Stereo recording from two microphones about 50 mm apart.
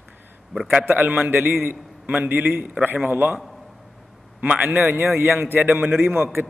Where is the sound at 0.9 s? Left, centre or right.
Right.